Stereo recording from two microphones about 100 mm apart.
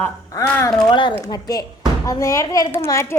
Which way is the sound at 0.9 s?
50° left (ahead or behind).